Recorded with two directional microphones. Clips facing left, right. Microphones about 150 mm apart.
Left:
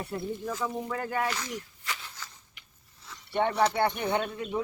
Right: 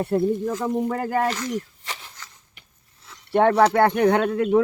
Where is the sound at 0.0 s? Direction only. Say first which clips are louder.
Right 12 dB; 50° right (ahead or behind).